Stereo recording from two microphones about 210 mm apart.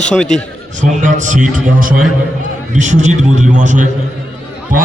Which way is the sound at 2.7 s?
35° right (ahead or behind).